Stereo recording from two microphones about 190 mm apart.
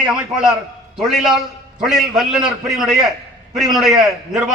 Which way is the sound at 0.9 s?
Centre (ahead or behind).